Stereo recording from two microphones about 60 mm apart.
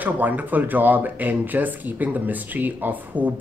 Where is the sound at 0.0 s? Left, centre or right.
Right.